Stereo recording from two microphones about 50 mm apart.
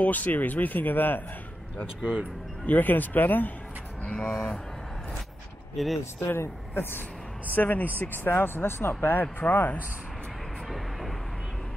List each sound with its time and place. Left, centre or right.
0.0 s speech: left
2.6 s speech: left
4.0 s speech: left
5.8 s speech: centre
6.7 s speech: left
7.5 s speech: left
10.7 s vehicle: centre